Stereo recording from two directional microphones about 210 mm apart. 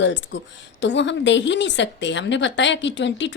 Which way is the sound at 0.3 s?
55° left (ahead or behind).